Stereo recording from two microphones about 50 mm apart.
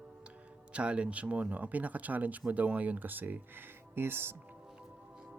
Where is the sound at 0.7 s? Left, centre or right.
Right.